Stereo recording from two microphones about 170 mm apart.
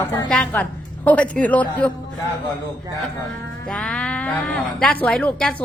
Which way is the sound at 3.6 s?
5° left (ahead or behind).